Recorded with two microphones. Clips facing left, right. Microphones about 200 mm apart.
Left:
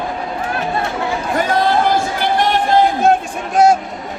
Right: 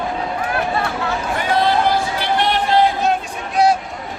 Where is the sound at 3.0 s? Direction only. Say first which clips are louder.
Left 5 dB; 50° left (ahead or behind).